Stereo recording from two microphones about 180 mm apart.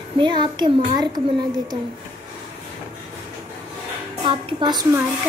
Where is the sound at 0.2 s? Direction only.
25° right (ahead or behind).